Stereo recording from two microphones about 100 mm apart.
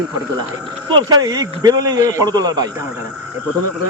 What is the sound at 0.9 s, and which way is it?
A man's voice, 45° right (ahead or behind).